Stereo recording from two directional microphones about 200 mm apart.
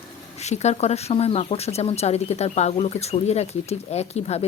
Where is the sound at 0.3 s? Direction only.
35° left (ahead or behind).